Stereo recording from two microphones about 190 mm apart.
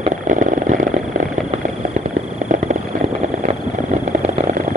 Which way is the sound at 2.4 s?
40° right (ahead or behind).